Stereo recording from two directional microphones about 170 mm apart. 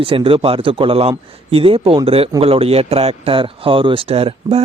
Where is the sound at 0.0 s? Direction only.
30° right (ahead or behind).